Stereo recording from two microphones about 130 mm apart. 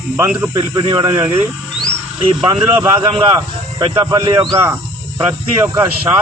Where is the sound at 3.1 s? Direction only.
30° right (ahead or behind).